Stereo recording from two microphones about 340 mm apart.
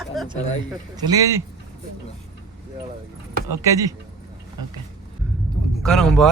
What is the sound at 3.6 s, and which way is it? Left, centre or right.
Speech, centre.